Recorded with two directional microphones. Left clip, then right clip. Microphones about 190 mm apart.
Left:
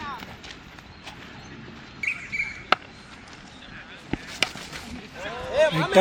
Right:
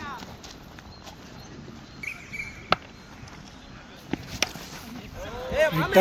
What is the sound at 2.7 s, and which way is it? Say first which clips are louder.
Basketball bounce: left 2 dB; 5° right (ahead or behind).